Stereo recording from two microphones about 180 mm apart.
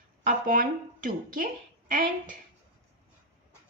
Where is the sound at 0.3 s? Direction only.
50° right (ahead or behind).